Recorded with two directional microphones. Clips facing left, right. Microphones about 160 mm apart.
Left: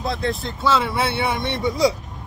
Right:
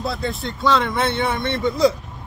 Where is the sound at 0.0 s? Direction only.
Centre (ahead or behind).